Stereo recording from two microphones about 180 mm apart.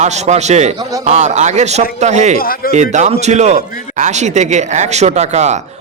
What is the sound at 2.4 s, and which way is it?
Speech, 55° left (ahead or behind).